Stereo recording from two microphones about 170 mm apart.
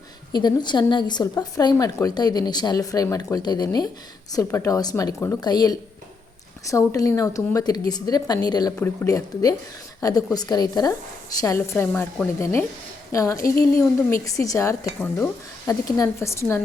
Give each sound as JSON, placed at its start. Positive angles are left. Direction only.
{"t": 0.3, "sound": "a woman's voice", "side_deg": 25}